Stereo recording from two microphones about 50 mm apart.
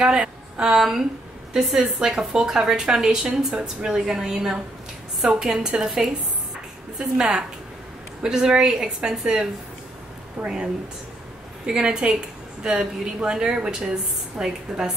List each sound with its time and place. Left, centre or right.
0.0 s a woman's voice: centre
10.4 s a woman's voice: centre